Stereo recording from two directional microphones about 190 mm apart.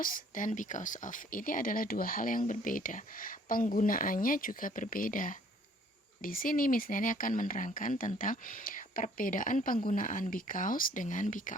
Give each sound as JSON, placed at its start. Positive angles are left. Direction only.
{"t": 0.0, "sound": "speech", "side_deg": 45}